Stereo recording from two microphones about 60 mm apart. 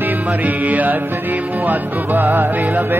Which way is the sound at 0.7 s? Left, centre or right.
Right.